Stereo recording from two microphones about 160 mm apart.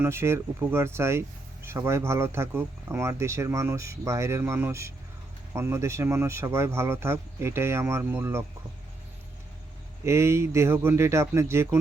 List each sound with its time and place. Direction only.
0.0 s speech: 15° right (ahead or behind)
10.0 s speech: 15° right (ahead or behind)